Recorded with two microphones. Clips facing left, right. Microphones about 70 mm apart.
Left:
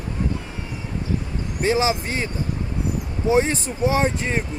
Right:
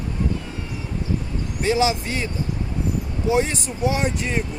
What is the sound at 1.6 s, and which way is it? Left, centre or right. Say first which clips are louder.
Speech: even; left.